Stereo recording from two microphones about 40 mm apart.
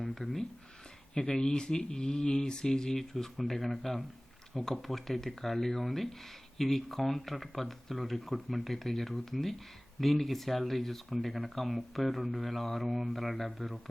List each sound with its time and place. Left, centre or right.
0.0 s speech: centre
1.1 s speech: centre